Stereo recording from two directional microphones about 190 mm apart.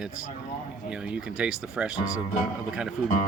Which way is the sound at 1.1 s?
5° right (ahead or behind).